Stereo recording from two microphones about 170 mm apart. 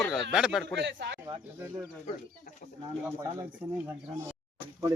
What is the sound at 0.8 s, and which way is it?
Speech, 90° right.